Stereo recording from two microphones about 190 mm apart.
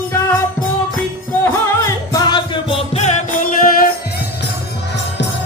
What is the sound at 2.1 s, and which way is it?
Music, 25° left (ahead or behind).